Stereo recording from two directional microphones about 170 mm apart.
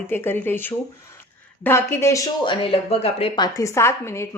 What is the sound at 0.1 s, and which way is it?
A woman's voice, 10° left (ahead or behind).